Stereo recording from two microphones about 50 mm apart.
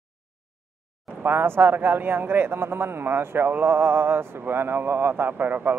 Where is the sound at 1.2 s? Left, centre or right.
Right.